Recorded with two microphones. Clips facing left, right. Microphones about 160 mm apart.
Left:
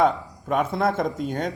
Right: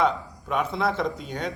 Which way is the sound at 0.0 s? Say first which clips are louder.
Left 3 dB; 50° left (ahead or behind).